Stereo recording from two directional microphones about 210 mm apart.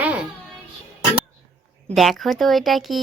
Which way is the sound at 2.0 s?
Centre (ahead or behind).